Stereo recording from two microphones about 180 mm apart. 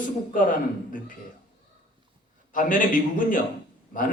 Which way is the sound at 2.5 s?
50° left (ahead or behind).